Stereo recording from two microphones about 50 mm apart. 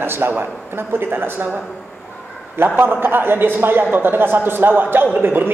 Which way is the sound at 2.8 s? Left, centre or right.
Right.